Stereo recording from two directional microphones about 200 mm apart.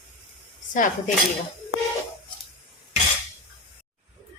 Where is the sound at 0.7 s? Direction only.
40° left (ahead or behind).